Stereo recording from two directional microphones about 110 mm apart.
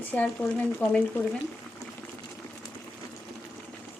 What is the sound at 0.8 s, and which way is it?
Speech, 15° left (ahead or behind).